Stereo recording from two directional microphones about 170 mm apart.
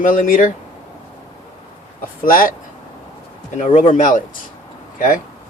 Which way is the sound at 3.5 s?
45° left (ahead or behind).